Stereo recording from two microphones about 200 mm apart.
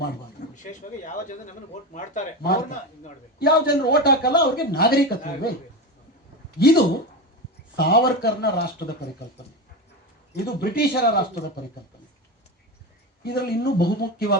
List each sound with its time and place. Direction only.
0.5 s a man's voice: 40° left (ahead or behind)
6.6 s a man's voice: 50° left (ahead or behind)
10.3 s a man's voice: 50° left (ahead or behind)
13.2 s a man's voice: 55° left (ahead or behind)